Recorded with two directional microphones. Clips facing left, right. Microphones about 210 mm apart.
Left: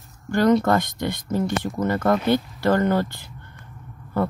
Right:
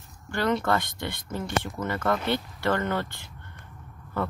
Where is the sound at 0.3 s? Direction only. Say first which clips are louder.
Left 7 dB; 40° left (ahead or behind).